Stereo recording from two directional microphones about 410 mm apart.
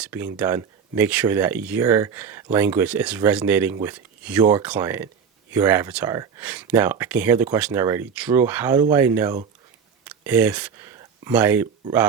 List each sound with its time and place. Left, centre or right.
0.0 s speech: centre